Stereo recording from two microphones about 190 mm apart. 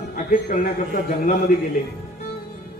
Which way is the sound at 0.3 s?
45° left (ahead or behind).